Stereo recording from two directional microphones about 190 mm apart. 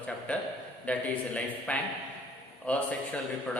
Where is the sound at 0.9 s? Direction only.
5° left (ahead or behind).